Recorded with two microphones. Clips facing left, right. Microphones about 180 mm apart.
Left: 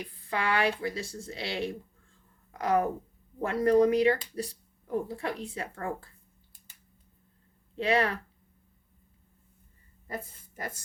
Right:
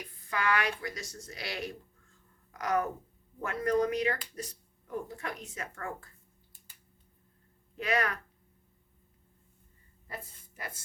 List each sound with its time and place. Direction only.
0.0 s speech: 30° left (ahead or behind)
7.8 s speech: 30° left (ahead or behind)